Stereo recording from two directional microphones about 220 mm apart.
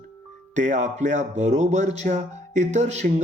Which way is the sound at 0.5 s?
35° right (ahead or behind).